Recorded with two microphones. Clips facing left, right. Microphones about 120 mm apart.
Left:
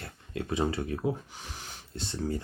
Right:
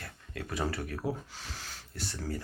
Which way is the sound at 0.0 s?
25° left (ahead or behind).